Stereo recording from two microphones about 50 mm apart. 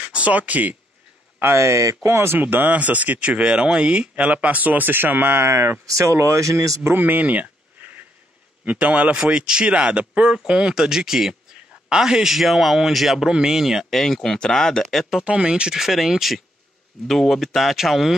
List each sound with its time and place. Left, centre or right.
0.0 s speech: right
1.4 s speech: right
2.0 s speech: right
2.4 s speech: right
5.5 s speech: right
7.0 s a sound: right
8.6 s speech: right
9.1 s speech: centre
15.2 s speech: right
15.7 s speech: centre